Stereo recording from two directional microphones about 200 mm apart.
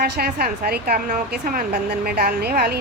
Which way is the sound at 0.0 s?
50° right (ahead or behind).